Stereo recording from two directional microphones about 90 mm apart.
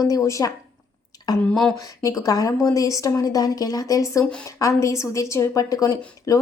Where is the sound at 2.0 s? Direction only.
40° left (ahead or behind).